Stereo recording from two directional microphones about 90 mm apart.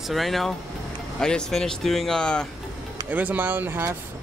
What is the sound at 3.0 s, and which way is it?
Speech, 20° right (ahead or behind).